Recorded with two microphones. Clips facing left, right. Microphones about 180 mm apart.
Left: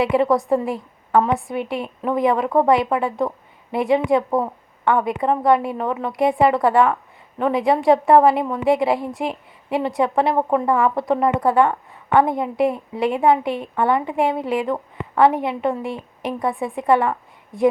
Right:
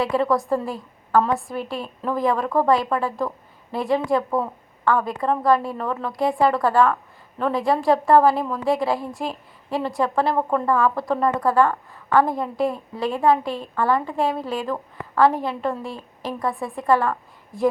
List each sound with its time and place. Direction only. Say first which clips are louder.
0.0 s a woman's voice: left 3 dB; 20° left (ahead or behind)